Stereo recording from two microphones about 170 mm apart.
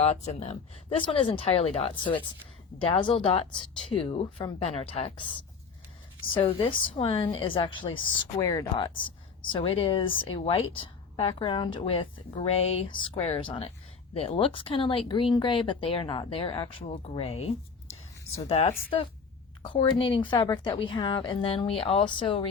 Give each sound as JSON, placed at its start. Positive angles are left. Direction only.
{"t": 0.0, "sound": "speech", "side_deg": 40}
{"t": 6.3, "sound": "speech", "side_deg": 30}
{"t": 8.4, "sound": "speech", "side_deg": 20}
{"t": 9.0, "sound": "a woman's voice", "side_deg": 30}